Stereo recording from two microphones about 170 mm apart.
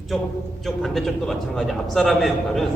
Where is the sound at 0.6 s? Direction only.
Centre (ahead or behind).